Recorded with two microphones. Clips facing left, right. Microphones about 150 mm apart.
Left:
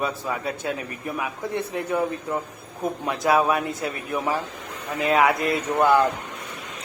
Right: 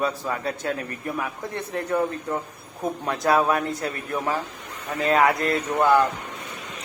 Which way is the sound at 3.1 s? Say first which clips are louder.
Even; centre (ahead or behind).